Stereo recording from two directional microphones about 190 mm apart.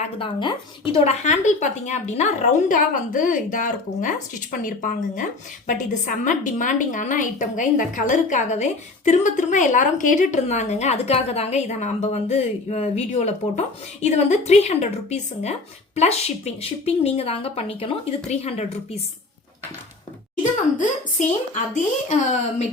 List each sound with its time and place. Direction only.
0.0 s a woman's voice: 25° left (ahead or behind)
1.2 s a woman's voice: 40° left (ahead or behind)
20.4 s a woman's voice: 40° left (ahead or behind)